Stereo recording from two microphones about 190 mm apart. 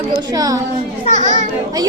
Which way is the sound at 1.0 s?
40° left (ahead or behind).